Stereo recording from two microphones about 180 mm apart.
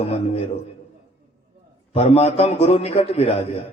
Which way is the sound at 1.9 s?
35° left (ahead or behind).